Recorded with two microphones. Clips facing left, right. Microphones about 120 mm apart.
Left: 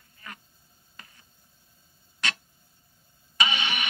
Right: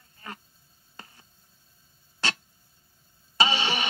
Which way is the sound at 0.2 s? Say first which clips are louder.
Right 3 dB; 30° right (ahead or behind).